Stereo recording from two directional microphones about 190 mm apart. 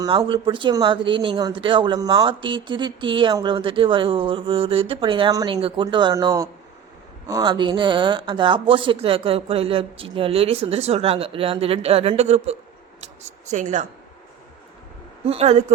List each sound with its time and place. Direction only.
0.0 s speech: 25° right (ahead or behind)
15.3 s speech: 35° right (ahead or behind)